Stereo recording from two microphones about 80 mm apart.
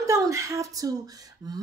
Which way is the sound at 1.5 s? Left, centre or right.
Right.